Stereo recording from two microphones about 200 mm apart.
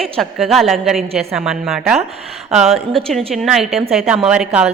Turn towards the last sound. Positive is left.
turn(degrees=-5)  # may be behind; listen again after turning